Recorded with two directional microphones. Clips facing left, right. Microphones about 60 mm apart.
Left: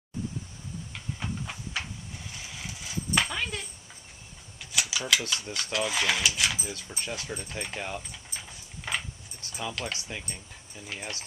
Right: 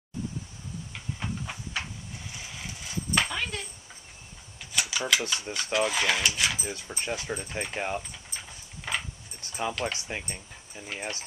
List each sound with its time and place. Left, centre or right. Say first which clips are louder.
0.9 s steam: even; centre
2.3 s horse: even; centre
4.7 s mechanisms: right 1 dB; centre
5.3 s a sound: right 2 dB; centre
5.9 s speech: right 1 dB; centre
7.0 s speech: right 4 dB; centre
8.1 s a sound: even; centre
9.4 s a sound: right 4 dB; right
9.9 s speech: right 3 dB; right